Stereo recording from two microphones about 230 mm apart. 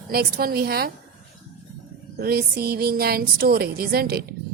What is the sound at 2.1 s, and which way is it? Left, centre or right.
A woman's voice, right.